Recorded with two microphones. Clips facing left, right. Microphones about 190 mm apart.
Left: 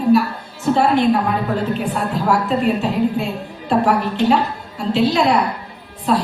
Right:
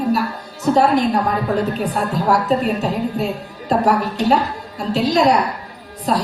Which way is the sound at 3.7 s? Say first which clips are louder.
Even; 40° right (ahead or behind).